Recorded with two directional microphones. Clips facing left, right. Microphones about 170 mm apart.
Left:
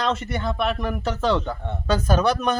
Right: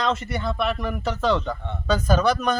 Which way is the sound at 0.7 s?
5° left (ahead or behind).